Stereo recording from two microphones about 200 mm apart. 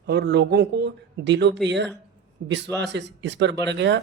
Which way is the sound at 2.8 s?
60° right (ahead or behind).